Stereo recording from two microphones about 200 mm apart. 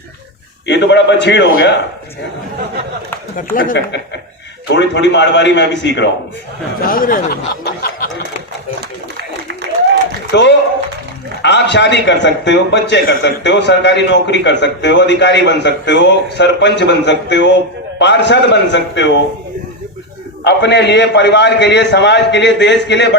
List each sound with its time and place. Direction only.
0.7 s a man's voice: 60° left (ahead or behind)
3.3 s speech: 45° left (ahead or behind)
4.7 s a man's voice: 60° left (ahead or behind)
6.8 s speech: 45° left (ahead or behind)
9.1 s a sound: 55° right (ahead or behind)
10.3 s a man's voice: 60° left (ahead or behind)
20.4 s a man's voice: 60° left (ahead or behind)